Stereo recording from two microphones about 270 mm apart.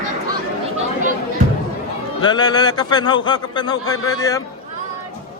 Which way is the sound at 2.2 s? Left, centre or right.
Centre.